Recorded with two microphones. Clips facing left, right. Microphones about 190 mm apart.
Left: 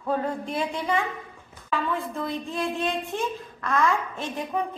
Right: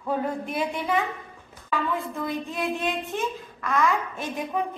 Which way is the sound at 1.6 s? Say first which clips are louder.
Even; centre (ahead or behind).